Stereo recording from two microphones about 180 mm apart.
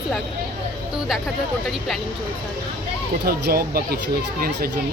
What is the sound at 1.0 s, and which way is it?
Speech, centre (ahead or behind).